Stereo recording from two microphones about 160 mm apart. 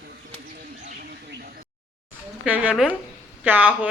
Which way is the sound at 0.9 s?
65° right (ahead or behind).